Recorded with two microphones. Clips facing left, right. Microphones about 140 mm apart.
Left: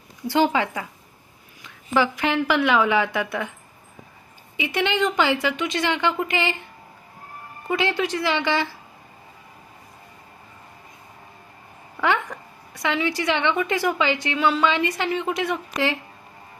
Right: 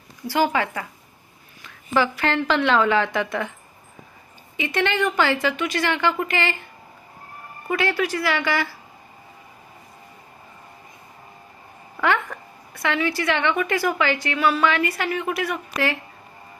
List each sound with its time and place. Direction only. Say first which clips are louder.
0.3 s a woman's voice: left 1 dB; 20° left (ahead or behind)
1.9 s a woman's voice: even; 15° left (ahead or behind)
4.5 s a woman's voice: right 1 dB; 15° left (ahead or behind)
7.7 s a woman's voice: even; 20° left (ahead or behind)
11.9 s a woman's voice: right 1 dB; 15° left (ahead or behind)